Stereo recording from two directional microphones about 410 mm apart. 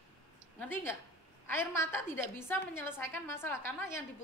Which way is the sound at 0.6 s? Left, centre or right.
Centre.